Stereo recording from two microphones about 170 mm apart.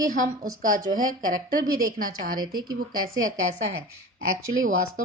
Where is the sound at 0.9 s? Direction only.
50° right (ahead or behind).